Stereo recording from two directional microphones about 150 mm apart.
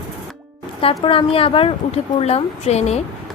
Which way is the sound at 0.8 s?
40° left (ahead or behind).